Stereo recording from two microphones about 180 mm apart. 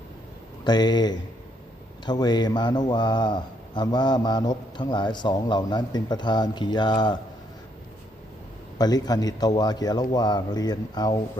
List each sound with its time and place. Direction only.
0.6 s a man's voice: 25° left (ahead or behind)
8.8 s a man's voice: 20° left (ahead or behind)